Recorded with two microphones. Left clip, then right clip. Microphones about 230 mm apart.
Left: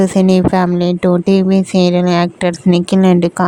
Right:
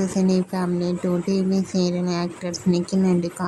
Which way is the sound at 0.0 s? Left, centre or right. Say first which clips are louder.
Left 11 dB; left.